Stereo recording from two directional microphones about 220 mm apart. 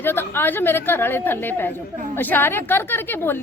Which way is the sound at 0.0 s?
10° left (ahead or behind).